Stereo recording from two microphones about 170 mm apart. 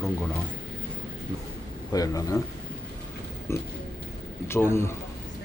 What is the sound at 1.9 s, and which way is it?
Speech, 20° left (ahead or behind).